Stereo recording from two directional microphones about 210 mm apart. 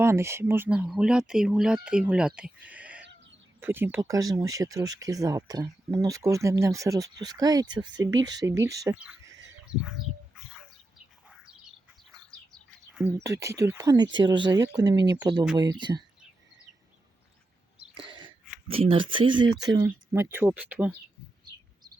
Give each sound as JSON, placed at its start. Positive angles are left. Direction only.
{"t": 0.0, "sound": "speech", "side_deg": -10}
{"t": 12.3, "sound": "bird", "side_deg": 5}
{"t": 13.0, "sound": "speech", "side_deg": -10}
{"t": 17.7, "sound": "throat clearing", "side_deg": -25}
{"t": 18.7, "sound": "speech", "side_deg": -25}